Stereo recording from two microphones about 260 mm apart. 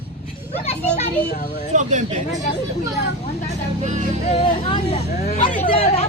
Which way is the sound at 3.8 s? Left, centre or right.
Right.